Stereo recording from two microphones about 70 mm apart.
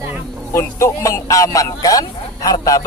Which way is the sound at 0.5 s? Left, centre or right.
Left.